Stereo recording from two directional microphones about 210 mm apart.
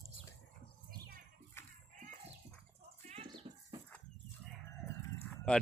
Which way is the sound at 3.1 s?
30° right (ahead or behind).